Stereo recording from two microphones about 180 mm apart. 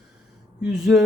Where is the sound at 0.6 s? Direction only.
5° right (ahead or behind).